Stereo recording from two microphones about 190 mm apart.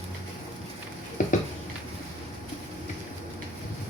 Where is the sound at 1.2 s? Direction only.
40° left (ahead or behind).